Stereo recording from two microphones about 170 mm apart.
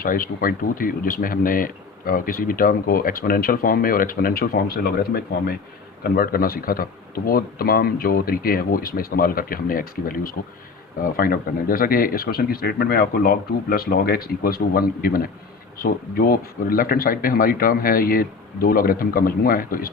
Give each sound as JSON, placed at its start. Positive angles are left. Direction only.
{"t": 0.0, "sound": "speech", "side_deg": 55}